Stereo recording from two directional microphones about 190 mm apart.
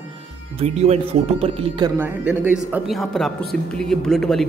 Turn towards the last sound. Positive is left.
turn(degrees=0)  # may be behind; listen again after turning